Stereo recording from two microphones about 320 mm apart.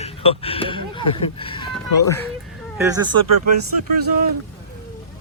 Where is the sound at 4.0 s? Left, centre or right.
Right.